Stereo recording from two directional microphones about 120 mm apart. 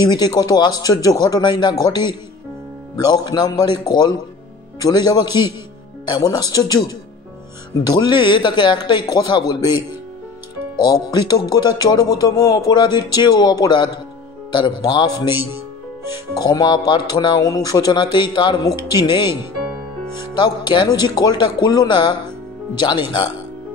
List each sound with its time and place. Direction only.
0.0 s speech: 35° left (ahead or behind)
7.9 s speech: 40° left (ahead or behind)
15.3 s music: 20° right (ahead or behind)
16.3 s speech: 35° left (ahead or behind)
20.3 s speech: 40° left (ahead or behind)